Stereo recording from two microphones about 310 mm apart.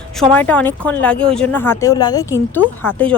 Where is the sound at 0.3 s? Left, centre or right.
Centre.